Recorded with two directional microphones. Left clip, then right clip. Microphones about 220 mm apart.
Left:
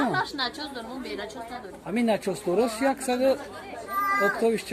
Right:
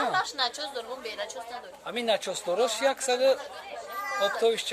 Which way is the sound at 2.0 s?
Centre (ahead or behind).